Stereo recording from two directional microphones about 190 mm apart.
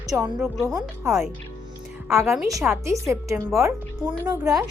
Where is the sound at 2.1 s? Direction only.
15° right (ahead or behind).